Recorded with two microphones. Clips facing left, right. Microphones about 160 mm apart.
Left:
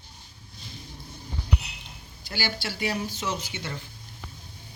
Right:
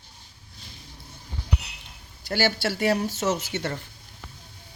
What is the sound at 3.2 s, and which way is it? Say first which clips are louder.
Speech: right 7 dB; 45° right (ahead or behind).